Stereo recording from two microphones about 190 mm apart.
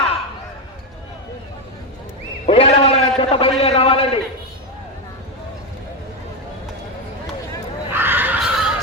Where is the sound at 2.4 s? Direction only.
30° left (ahead or behind).